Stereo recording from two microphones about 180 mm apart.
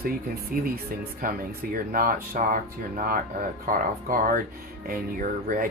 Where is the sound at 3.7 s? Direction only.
50° right (ahead or behind).